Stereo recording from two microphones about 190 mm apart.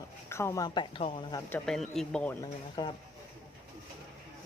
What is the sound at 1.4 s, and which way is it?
Speech, 10° left (ahead or behind).